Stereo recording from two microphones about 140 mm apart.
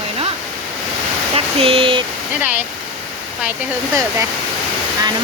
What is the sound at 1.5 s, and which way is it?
Speech, 40° right (ahead or behind).